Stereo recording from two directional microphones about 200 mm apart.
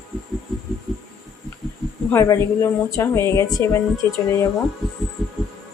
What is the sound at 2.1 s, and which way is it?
A woman's voice, 15° left (ahead or behind).